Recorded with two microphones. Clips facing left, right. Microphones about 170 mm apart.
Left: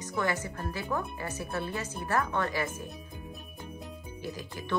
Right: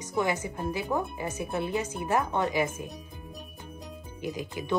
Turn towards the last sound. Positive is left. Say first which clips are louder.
# right 5 dB
turn(degrees=-15)  # may be behind; listen again after turning